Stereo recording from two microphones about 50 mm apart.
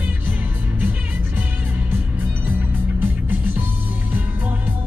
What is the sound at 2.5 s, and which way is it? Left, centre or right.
Music, right.